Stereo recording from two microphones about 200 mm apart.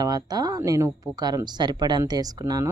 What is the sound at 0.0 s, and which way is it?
Speech, 20° right (ahead or behind).